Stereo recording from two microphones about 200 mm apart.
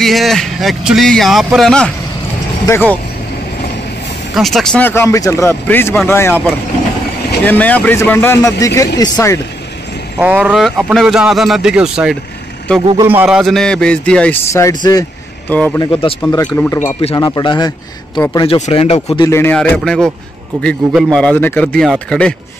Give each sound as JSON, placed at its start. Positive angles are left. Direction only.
{"t": 0.0, "sound": "speech", "side_deg": 0}
{"t": 4.4, "sound": "speech", "side_deg": 0}
{"t": 7.4, "sound": "speech", "side_deg": 10}
{"t": 10.1, "sound": "speech", "side_deg": -10}
{"t": 12.8, "sound": "a man's voice", "side_deg": -20}
{"t": 13.1, "sound": "speech", "side_deg": -5}
{"t": 15.5, "sound": "speech", "side_deg": 10}
{"t": 15.8, "sound": "speech", "side_deg": 25}
{"t": 16.4, "sound": "speech", "side_deg": 10}
{"t": 17.1, "sound": "speech", "side_deg": 20}
{"t": 18.7, "sound": "speech", "side_deg": 30}
{"t": 19.2, "sound": "speech", "side_deg": 10}